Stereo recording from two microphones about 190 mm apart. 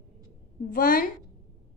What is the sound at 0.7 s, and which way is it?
Speech, 50° left (ahead or behind).